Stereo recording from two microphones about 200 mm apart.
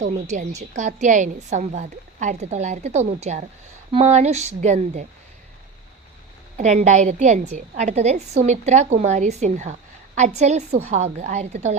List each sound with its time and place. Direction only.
0.0 s a woman's voice: 35° right (ahead or behind)
6.6 s a woman's voice: 35° right (ahead or behind)